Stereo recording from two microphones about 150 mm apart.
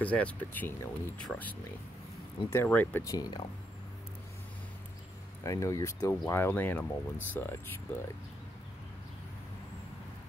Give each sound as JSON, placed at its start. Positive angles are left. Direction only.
{"t": 0.0, "sound": "speech", "side_deg": 10}
{"t": 3.1, "sound": "speech", "side_deg": 25}
{"t": 5.4, "sound": "speech", "side_deg": 20}